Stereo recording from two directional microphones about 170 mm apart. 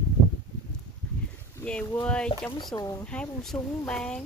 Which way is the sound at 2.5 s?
25° left (ahead or behind).